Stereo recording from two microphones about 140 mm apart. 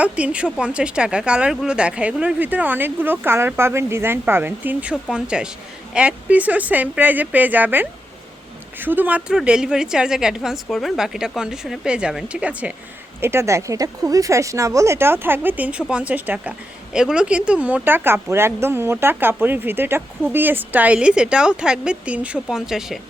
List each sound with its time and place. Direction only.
0.0 s a woman's voice: 10° right (ahead or behind)
13.2 s a woman's voice: 20° right (ahead or behind); by 23.0 s 5° right (ahead or behind)